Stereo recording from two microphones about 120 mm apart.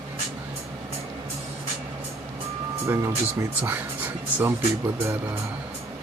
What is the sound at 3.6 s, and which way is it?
Speech, 15° right (ahead or behind).